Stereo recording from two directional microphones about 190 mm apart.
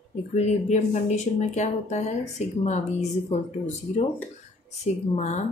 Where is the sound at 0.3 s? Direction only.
40° left (ahead or behind).